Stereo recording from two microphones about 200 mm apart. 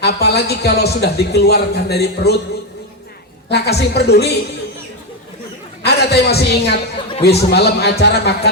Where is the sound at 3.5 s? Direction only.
55° left (ahead or behind).